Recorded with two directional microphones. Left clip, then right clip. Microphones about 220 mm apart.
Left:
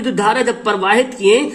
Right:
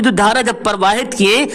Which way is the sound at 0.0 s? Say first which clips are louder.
Right 2 dB; 45° right (ahead or behind).